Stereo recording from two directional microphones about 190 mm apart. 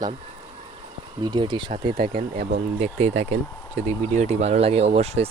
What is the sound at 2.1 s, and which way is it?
Speech, 55° right (ahead or behind).